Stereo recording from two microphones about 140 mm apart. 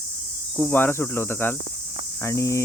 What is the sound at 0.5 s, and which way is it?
Speech, 15° left (ahead or behind).